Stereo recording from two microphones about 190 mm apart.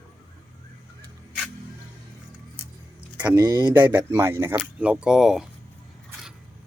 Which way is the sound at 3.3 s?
20° right (ahead or behind).